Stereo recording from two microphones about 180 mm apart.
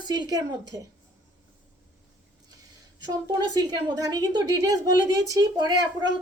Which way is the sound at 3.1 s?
20° right (ahead or behind).